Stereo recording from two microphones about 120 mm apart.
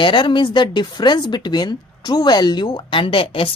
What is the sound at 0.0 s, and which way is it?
Speech, 40° left (ahead or behind).